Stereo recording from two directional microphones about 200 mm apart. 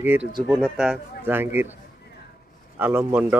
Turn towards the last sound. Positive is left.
turn(degrees=-10)  # may be behind; listen again after turning